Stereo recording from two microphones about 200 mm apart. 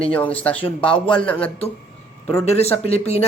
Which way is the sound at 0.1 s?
5° left (ahead or behind).